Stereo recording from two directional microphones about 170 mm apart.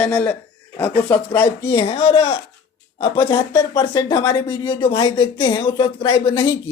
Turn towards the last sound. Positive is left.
turn(degrees=30)  # may be behind; listen again after turning